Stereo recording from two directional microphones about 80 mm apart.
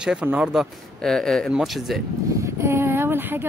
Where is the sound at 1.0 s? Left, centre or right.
Centre.